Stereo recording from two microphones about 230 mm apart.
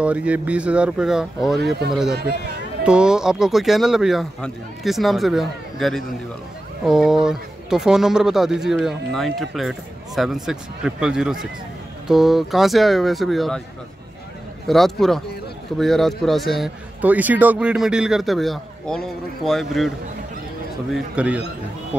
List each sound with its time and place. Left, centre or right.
0.0 s speech: centre
1.6 s speech: right
2.8 s speech: centre
14.7 s speech: centre
20.9 s speech: centre